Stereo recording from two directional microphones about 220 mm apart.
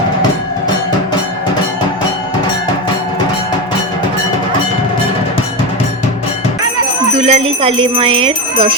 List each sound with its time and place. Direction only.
7.2 s jingle bell: 30° right (ahead or behind)